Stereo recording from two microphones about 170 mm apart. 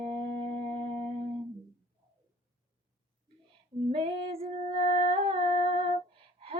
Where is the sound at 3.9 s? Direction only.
35° right (ahead or behind).